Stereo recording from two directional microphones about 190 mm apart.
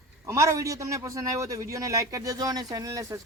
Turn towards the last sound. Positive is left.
turn(degrees=-15)  # may be behind; listen again after turning